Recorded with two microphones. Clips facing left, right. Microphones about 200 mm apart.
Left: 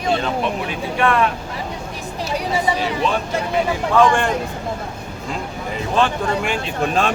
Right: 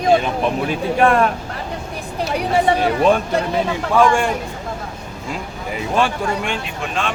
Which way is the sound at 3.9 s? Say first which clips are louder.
Right 1 dB; 10° right (ahead or behind).